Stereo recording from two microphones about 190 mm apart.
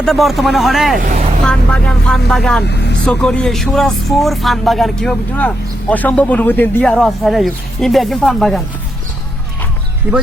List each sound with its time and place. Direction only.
0.0 s speech: centre (ahead or behind)
2.6 s vehicle: 60° left (ahead or behind)
3.1 s speech: 5° left (ahead or behind)
10.1 s speech: 5° right (ahead or behind)